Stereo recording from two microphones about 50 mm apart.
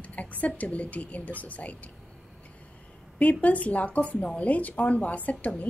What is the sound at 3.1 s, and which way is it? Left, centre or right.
A woman's voice, left.